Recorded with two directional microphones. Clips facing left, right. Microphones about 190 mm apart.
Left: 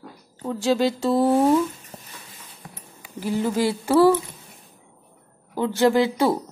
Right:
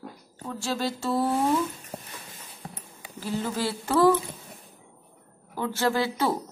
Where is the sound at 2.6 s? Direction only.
30° right (ahead or behind).